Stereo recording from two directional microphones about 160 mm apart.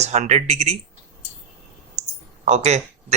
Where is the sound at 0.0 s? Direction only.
45° right (ahead or behind).